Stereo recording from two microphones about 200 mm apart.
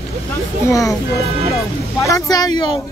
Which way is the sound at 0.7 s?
15° left (ahead or behind).